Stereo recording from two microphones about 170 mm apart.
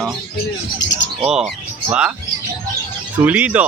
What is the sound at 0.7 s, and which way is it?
Bird, 90° left.